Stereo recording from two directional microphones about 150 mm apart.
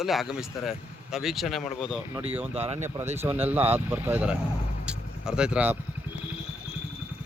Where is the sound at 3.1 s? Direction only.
15° right (ahead or behind).